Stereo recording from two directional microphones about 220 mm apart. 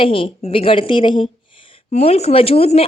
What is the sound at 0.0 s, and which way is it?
Speech, 25° left (ahead or behind).